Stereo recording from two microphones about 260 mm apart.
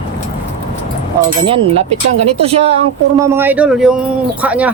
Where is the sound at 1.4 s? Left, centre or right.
Right.